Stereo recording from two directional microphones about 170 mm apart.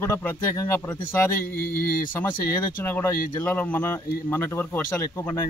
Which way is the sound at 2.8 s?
10° left (ahead or behind).